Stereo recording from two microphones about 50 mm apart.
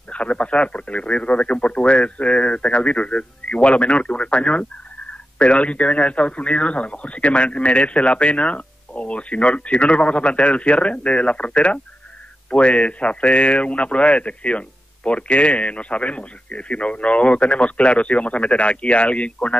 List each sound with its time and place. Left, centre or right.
0.1 s speech: left